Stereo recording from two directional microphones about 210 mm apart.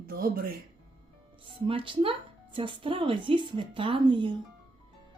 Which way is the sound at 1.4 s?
25° right (ahead or behind).